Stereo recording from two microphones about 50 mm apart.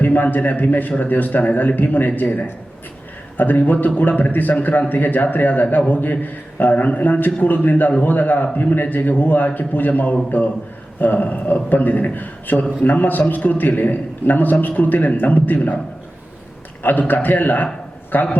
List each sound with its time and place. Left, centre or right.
0.0 s a man's voice: left
3.3 s a man's voice: left
16.8 s a man's voice: left